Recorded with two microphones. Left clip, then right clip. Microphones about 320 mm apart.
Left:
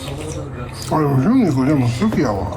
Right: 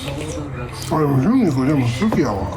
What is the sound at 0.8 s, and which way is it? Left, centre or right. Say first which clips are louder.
Speech: left 1 dB; centre.